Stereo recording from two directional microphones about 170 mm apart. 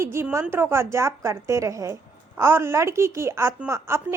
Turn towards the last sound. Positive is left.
turn(degrees=-15)  # may be behind; listen again after turning